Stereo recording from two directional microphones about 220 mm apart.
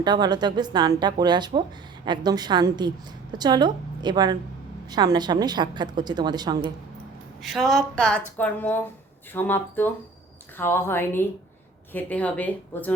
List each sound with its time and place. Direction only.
0.0 s a woman's voice: 20° right (ahead or behind)
7.4 s a woman's voice: centre (ahead or behind)